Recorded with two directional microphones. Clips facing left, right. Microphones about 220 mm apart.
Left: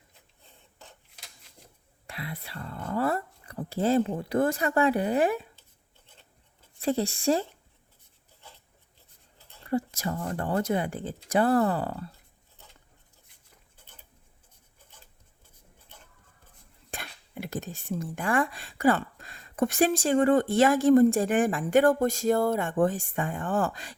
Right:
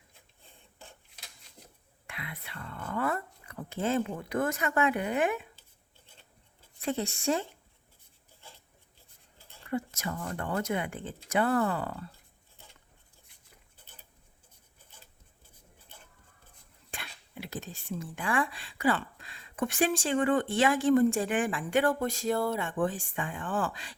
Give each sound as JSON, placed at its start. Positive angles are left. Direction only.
{"t": 2.0, "sound": "speech", "side_deg": 35}
{"t": 6.8, "sound": "speech", "side_deg": 35}
{"t": 9.6, "sound": "speech", "side_deg": 35}
{"t": 16.9, "sound": "speech", "side_deg": 45}